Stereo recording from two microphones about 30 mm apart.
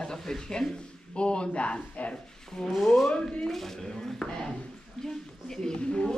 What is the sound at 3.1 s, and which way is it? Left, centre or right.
Speech, left.